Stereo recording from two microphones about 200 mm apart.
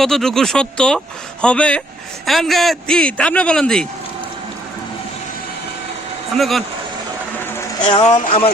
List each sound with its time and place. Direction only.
0.0 s speech: centre (ahead or behind)
6.3 s speech: centre (ahead or behind)
7.9 s speech: 35° left (ahead or behind)